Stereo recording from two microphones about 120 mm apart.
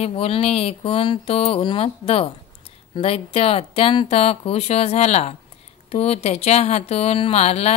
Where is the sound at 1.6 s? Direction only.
45° left (ahead or behind).